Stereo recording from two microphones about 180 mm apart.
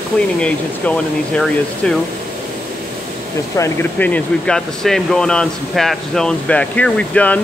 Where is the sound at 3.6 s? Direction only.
10° left (ahead or behind).